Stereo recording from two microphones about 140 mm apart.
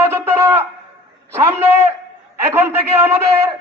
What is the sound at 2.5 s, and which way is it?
Speech, 15° right (ahead or behind).